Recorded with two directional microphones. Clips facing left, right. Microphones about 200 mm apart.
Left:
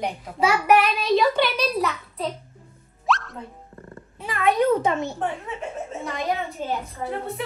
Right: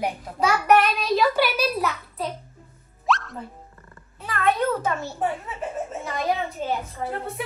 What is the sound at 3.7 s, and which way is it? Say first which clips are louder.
Cat: left 9 dB; 40° left (ahead or behind).